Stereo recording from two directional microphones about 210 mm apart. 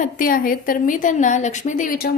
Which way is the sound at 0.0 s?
40° left (ahead or behind).